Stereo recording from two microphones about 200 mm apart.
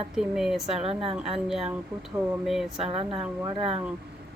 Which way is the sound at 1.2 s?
Centre (ahead or behind).